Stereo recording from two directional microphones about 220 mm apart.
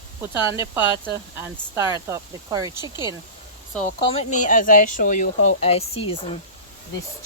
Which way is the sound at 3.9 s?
30° left (ahead or behind).